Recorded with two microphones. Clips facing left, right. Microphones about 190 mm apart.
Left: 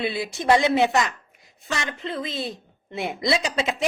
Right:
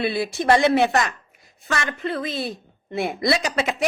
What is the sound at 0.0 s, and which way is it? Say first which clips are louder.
A woman's voice: right 3 dB; 20° left (ahead or behind).